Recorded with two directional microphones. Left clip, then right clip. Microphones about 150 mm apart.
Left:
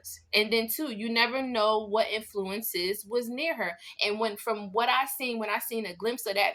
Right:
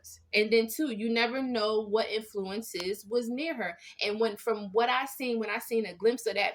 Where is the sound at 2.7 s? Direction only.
20° right (ahead or behind).